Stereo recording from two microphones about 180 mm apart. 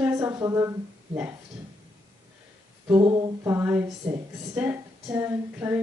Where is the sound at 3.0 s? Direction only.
25° right (ahead or behind).